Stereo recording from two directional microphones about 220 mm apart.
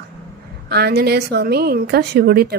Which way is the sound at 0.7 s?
45° right (ahead or behind).